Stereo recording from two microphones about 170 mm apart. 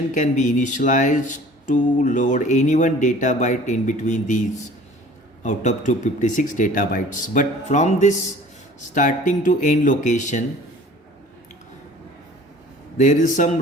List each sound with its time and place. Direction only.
0.1 s speech: 45° left (ahead or behind)
13.0 s speech: 50° left (ahead or behind)